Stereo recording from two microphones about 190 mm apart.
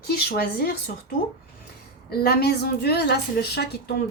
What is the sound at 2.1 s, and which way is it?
A woman's voice, 60° left (ahead or behind).